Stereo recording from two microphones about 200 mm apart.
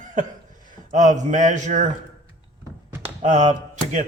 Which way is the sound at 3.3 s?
35° right (ahead or behind).